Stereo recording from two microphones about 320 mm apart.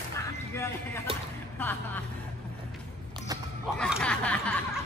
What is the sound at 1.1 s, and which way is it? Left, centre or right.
Music, centre.